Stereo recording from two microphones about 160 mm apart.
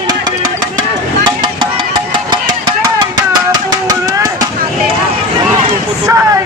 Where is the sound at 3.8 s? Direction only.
25° right (ahead or behind).